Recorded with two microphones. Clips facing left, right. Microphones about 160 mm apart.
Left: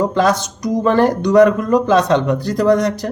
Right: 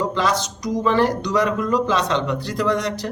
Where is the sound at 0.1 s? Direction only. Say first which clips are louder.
Left 6 dB; 50° left (ahead or behind).